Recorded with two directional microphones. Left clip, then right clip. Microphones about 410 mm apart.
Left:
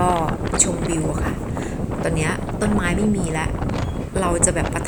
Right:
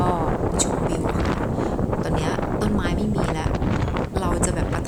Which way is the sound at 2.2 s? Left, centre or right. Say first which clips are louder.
Left 1 dB; centre.